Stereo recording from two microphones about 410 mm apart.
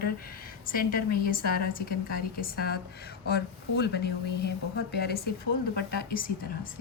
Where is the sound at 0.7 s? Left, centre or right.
Left.